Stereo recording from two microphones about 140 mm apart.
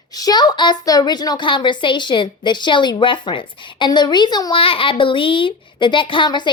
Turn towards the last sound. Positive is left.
turn(degrees=35)  # may be behind; listen again after turning